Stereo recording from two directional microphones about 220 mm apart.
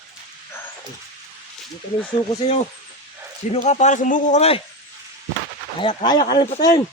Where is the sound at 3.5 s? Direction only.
30° left (ahead or behind).